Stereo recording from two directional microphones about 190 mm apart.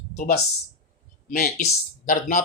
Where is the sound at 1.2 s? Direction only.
45° left (ahead or behind).